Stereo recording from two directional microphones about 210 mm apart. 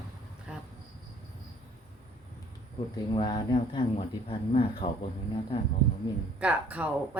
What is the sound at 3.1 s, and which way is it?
Speech, 20° left (ahead or behind).